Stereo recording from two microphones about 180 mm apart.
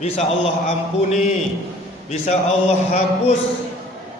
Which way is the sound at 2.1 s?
35° left (ahead or behind).